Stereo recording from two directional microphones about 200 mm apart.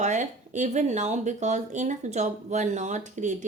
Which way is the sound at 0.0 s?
35° right (ahead or behind).